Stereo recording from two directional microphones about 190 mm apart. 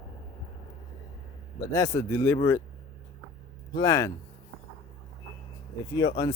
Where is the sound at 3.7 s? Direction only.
15° left (ahead or behind).